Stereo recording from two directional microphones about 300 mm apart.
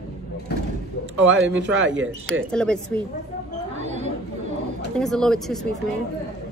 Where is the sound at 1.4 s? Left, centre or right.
Right.